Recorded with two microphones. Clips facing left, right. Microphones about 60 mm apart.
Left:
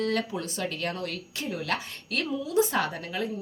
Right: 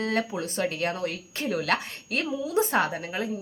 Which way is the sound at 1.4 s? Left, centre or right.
Right.